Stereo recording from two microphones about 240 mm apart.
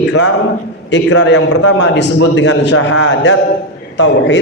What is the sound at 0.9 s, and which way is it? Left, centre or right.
A man's voice, left.